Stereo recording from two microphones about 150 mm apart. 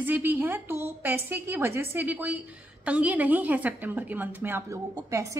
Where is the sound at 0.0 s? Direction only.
10° right (ahead or behind).